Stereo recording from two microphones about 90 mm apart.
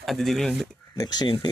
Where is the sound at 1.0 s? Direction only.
50° left (ahead or behind).